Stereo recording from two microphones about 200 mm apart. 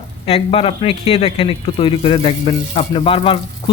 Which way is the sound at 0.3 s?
30° left (ahead or behind).